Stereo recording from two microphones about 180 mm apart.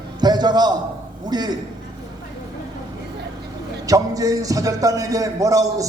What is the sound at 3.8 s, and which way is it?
A man's voice, 20° right (ahead or behind).